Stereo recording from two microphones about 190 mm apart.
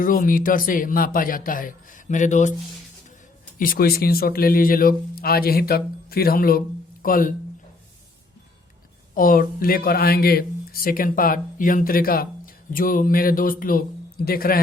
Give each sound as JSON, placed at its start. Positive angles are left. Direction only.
{"t": 0.0, "sound": "speech", "side_deg": 45}
{"t": 3.6, "sound": "speech", "side_deg": 50}
{"t": 9.1, "sound": "speech", "side_deg": 45}